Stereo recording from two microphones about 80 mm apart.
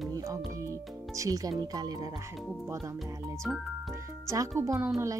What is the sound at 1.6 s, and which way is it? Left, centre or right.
Speech, right.